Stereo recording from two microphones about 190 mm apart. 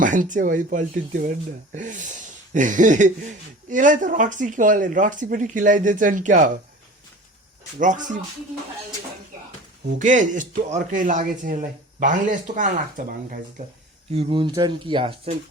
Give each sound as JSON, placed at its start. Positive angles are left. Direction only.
{"t": 0.0, "sound": "speech", "side_deg": -45}
{"t": 7.8, "sound": "speech", "side_deg": -40}
{"t": 10.0, "sound": "speech", "side_deg": -40}
{"t": 14.1, "sound": "speech", "side_deg": -30}